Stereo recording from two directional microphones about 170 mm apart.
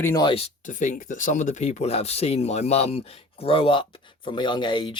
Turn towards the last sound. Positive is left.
turn(degrees=30)  # may be behind; listen again after turning